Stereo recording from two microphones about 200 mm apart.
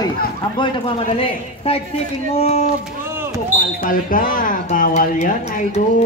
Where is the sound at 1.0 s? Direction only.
30° left (ahead or behind).